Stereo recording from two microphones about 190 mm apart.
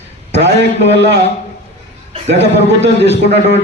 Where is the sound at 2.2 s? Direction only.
65° right (ahead or behind).